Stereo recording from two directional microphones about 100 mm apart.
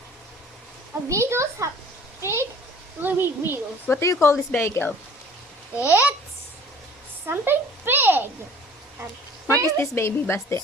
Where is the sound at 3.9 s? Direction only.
30° left (ahead or behind).